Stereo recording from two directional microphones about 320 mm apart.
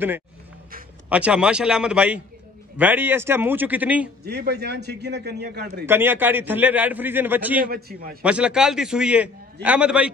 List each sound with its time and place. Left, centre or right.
1.0 s a man's voice: centre
4.2 s a man's voice: right
5.9 s a man's voice: centre
7.7 s a man's voice: right
8.2 s a man's voice: centre